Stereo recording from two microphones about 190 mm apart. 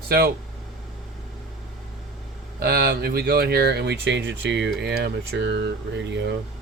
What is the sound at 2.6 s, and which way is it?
Speech, 55° right (ahead or behind).